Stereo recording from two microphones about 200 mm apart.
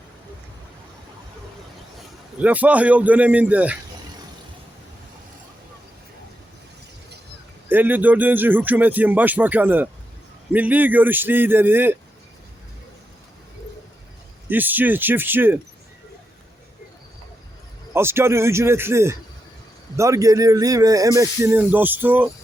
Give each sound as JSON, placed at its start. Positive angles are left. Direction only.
{"t": 2.4, "sound": "speech", "side_deg": -5}
{"t": 7.7, "sound": "speech", "side_deg": -10}
{"t": 14.5, "sound": "speech", "side_deg": -10}
{"t": 17.9, "sound": "speech", "side_deg": -10}